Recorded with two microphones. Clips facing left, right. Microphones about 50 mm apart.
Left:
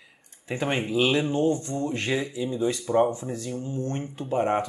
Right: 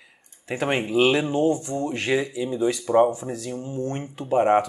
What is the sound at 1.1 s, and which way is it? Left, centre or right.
Speech, centre.